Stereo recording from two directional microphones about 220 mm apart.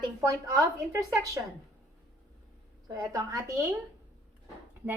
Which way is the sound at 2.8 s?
15° right (ahead or behind).